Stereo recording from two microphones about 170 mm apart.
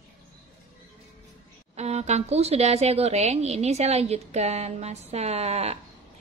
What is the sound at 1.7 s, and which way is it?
Speech, 40° right (ahead or behind).